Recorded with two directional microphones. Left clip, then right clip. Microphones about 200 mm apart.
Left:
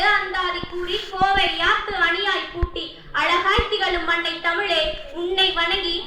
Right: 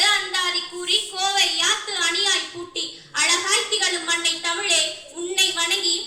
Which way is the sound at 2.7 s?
70° right (ahead or behind).